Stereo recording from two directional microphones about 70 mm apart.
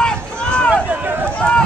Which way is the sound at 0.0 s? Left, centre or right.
Centre.